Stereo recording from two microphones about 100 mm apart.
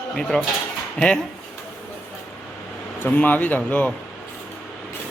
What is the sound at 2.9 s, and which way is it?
Speech, 15° left (ahead or behind).